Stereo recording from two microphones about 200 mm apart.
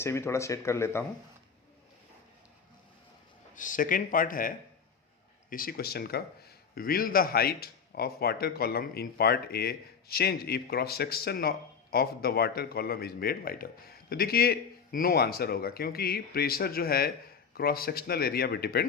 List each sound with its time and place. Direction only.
0.0 s speech: 15° left (ahead or behind)
3.5 s a man's voice: 40° left (ahead or behind)